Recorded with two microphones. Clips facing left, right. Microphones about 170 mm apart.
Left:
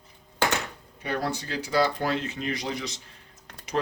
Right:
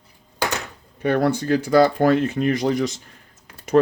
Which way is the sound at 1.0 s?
60° right (ahead or behind).